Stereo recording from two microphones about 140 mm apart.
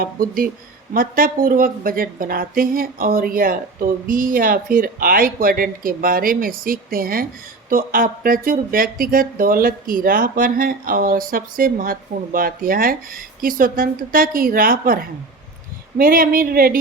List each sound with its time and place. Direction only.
0.0 s speech: 90° right
16.0 s speech: 90° right